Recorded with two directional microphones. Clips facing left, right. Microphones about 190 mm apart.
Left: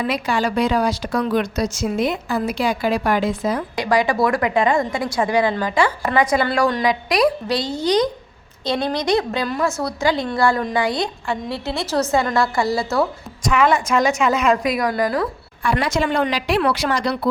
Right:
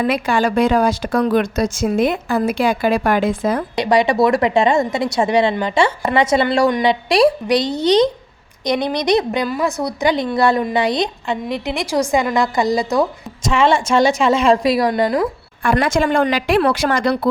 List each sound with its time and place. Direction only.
0.0 s a woman's voice: 55° right (ahead or behind)
3.8 s a woman's voice: 25° right (ahead or behind)
15.6 s a woman's voice: 50° right (ahead or behind)